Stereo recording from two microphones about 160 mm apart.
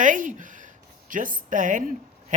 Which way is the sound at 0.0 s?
50° right (ahead or behind).